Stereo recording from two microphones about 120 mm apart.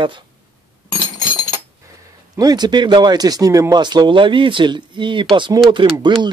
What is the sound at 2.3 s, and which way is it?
Speech, 35° right (ahead or behind).